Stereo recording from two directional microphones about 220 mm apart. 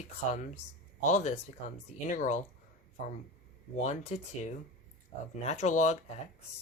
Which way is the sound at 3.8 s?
30° left (ahead or behind).